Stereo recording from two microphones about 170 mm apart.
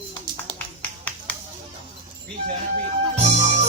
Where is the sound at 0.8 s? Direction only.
10° left (ahead or behind).